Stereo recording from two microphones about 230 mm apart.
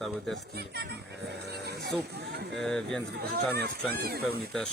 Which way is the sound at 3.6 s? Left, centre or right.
Right.